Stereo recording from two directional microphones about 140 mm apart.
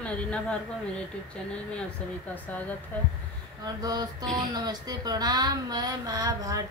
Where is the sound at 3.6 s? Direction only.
25° right (ahead or behind).